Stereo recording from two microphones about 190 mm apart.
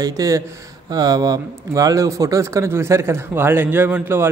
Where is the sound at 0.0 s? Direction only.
15° right (ahead or behind).